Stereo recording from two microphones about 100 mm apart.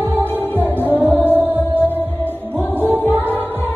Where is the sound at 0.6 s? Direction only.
20° left (ahead or behind).